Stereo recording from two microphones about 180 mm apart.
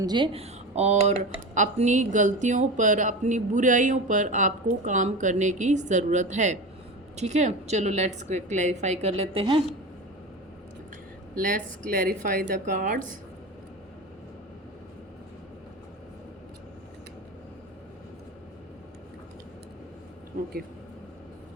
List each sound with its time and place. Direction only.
0.0 s a woman's voice: 25° right (ahead or behind)
11.4 s speech: 50° right (ahead or behind)